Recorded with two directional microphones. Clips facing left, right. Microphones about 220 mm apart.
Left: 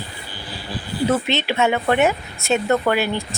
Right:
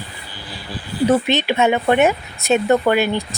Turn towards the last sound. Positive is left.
turn(degrees=-15)  # may be behind; listen again after turning